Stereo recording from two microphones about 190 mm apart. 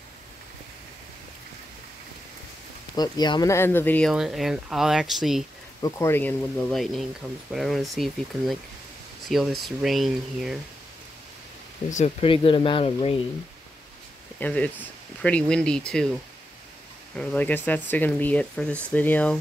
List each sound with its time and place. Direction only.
3.0 s speech: 20° left (ahead or behind)
4.1 s speech: centre (ahead or behind)
5.8 s speech: 15° left (ahead or behind); by 10.6 s centre (ahead or behind)
11.9 s speech: 35° left (ahead or behind)
14.4 s speech: 5° left (ahead or behind)
17.1 s speech: 5° left (ahead or behind)